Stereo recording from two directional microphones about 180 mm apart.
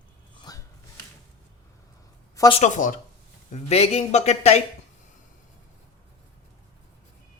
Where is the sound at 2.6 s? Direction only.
45° left (ahead or behind).